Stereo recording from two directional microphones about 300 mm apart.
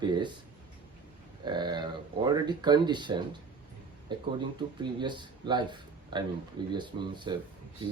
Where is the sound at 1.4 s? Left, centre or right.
Centre.